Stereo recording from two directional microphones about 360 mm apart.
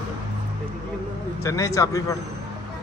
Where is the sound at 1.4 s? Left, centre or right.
Centre.